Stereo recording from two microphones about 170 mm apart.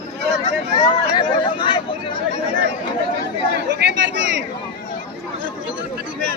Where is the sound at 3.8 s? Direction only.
90° right.